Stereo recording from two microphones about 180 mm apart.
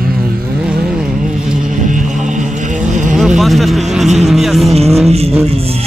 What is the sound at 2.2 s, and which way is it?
Vehicle, 45° right (ahead or behind).